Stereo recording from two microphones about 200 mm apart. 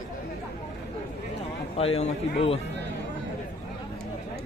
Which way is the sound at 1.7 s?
30° left (ahead or behind).